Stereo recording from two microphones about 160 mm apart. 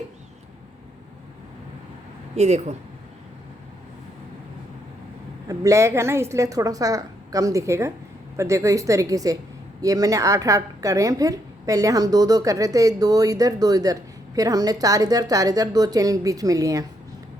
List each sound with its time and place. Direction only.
2.3 s speech: 45° right (ahead or behind)
5.5 s a woman's voice: 20° right (ahead or behind)